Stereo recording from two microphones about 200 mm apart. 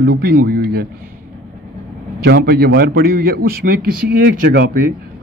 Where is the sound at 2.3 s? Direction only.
50° right (ahead or behind).